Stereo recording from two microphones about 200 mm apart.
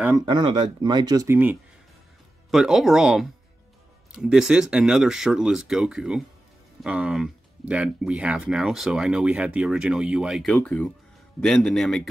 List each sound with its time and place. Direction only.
0.2 s speech: 20° right (ahead or behind); by 12.1 s centre (ahead or behind)